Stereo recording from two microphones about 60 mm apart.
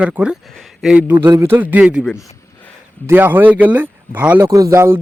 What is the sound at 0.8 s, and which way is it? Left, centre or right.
Speech, centre.